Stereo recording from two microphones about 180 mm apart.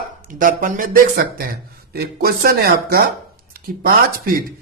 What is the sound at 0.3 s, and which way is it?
A man's voice, 50° right (ahead or behind).